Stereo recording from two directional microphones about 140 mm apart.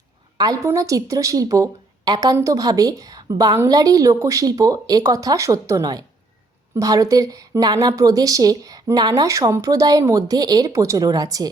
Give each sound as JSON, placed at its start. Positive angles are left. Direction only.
{"t": 0.3, "sound": "a woman's voice", "side_deg": -25}